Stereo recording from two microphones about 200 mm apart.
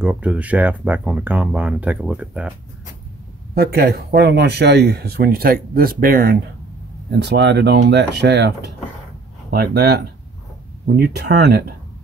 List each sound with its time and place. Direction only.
0.0 s speech: 5° right (ahead or behind)
3.5 s speech: 50° right (ahead or behind)
7.1 s speech: 60° right (ahead or behind)